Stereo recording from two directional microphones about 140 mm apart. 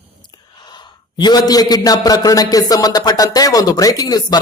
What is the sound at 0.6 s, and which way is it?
A man's voice, 30° left (ahead or behind).